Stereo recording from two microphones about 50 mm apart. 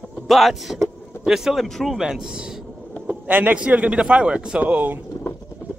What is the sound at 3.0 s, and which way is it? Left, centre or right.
A man's voice, right.